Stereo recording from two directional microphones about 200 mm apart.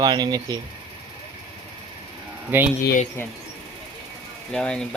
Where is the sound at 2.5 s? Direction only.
10° right (ahead or behind).